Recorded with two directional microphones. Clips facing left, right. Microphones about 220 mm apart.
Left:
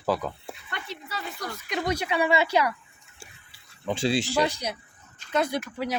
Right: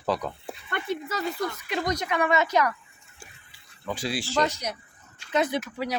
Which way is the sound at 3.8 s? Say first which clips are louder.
Left 5 dB; 25° left (ahead or behind).